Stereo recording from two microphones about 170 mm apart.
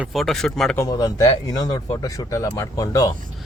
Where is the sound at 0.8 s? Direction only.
20° left (ahead or behind).